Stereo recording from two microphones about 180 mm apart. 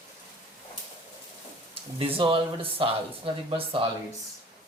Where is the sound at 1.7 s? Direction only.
30° right (ahead or behind).